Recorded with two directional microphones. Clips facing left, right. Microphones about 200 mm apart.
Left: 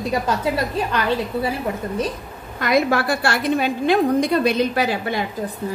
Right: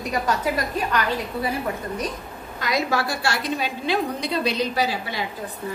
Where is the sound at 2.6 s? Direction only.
55° left (ahead or behind).